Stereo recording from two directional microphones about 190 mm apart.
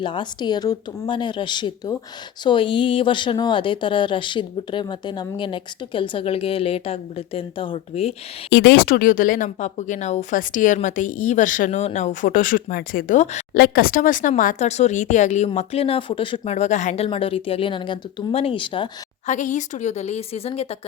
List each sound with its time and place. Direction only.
0.0 s speech: 25° left (ahead or behind)
8.5 s speech: 60° left (ahead or behind); by 19.3 s 25° left (ahead or behind)
19.3 s speech: 40° left (ahead or behind)